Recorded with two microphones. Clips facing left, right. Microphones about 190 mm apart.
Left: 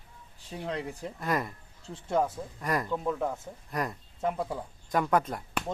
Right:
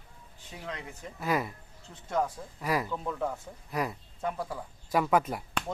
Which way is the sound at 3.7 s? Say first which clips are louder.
Right 1 dB; 5° right (ahead or behind).